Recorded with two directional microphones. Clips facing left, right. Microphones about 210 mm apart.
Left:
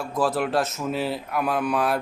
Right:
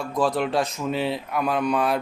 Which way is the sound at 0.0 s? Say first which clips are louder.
Right 1 dB; 5° left (ahead or behind).